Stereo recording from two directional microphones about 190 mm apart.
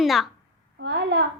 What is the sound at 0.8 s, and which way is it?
Speech, 65° right (ahead or behind).